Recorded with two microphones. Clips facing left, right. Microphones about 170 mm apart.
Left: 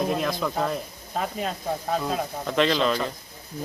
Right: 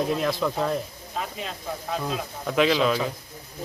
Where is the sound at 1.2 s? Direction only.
45° left (ahead or behind).